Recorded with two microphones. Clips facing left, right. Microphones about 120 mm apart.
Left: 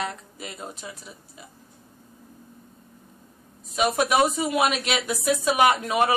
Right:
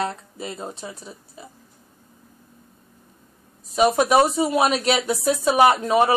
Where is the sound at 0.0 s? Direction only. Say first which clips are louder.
Right 5 dB; 30° right (ahead or behind).